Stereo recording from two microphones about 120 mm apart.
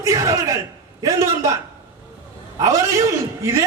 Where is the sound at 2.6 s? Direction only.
25° right (ahead or behind).